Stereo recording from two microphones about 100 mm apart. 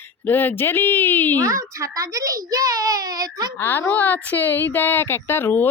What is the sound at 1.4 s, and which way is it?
A child's voice, 35° right (ahead or behind).